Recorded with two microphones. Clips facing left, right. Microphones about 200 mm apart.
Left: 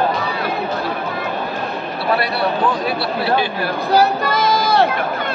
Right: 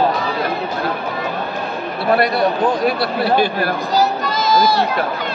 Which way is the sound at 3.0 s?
45° right (ahead or behind).